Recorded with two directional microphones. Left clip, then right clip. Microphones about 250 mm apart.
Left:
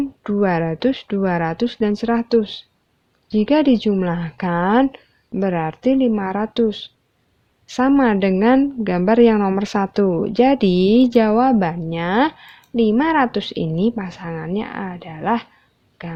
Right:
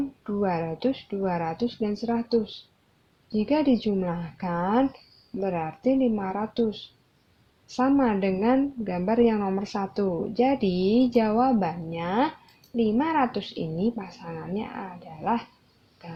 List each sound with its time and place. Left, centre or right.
0.3 s a woman's voice: left